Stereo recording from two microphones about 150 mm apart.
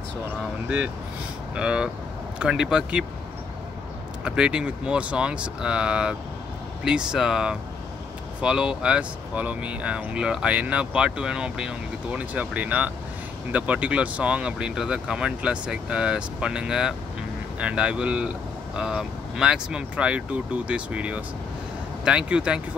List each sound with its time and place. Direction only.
1.5 s speech: 5° right (ahead or behind)
4.2 s speech: 5° right (ahead or behind)